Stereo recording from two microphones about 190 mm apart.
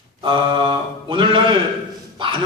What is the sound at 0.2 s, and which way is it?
Mantra, 25° right (ahead or behind).